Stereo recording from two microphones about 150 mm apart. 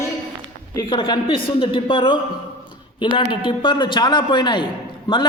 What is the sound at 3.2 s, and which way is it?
A man's voice, 35° left (ahead or behind).